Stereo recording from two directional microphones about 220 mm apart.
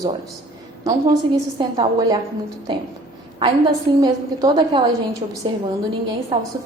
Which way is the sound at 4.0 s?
15° right (ahead or behind).